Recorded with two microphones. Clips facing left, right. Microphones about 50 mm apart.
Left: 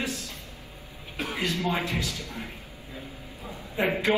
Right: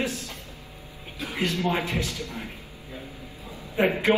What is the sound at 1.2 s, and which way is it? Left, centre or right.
Speech, left.